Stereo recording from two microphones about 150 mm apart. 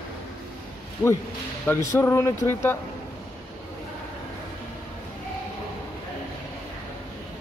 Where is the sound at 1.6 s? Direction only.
15° left (ahead or behind).